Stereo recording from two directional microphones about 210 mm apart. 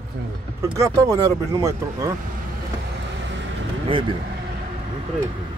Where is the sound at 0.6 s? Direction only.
15° right (ahead or behind).